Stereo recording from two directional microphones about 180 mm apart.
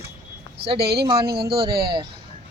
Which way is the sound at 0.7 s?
65° right (ahead or behind).